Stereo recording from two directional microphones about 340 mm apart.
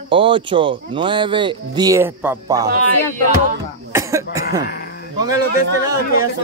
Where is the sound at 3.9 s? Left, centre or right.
Centre.